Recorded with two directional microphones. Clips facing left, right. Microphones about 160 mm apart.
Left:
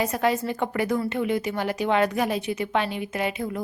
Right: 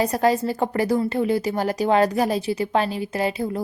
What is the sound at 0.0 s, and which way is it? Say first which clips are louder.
A woman's voice: right 4 dB; 35° right (ahead or behind).